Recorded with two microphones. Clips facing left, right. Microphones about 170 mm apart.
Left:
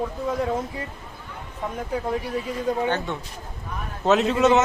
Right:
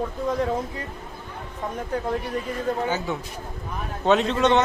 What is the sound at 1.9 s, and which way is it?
Speech, 5° left (ahead or behind).